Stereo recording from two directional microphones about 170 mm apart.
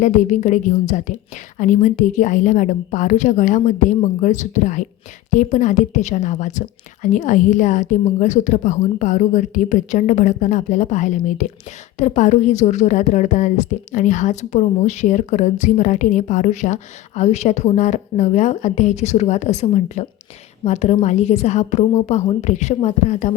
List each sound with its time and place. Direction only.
0.0 s a woman's voice: 45° left (ahead or behind)